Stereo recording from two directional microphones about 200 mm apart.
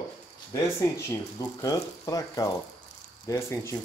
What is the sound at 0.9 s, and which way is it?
Speech, 15° left (ahead or behind).